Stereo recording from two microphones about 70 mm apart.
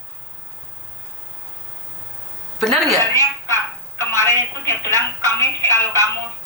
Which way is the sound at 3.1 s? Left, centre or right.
Right.